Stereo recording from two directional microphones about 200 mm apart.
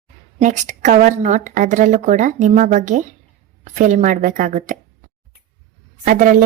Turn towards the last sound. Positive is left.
turn(degrees=-40)  # may be behind; listen again after turning